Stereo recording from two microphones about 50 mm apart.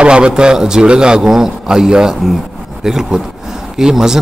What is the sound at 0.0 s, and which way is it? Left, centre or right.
A man's voice, centre.